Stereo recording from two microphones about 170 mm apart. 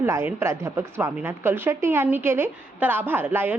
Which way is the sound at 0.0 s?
15° right (ahead or behind).